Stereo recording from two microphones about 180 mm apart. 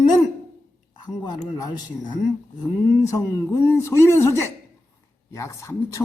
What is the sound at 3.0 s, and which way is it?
Speech, 15° left (ahead or behind).